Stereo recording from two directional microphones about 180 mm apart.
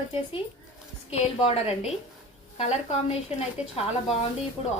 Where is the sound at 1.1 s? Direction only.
35° left (ahead or behind).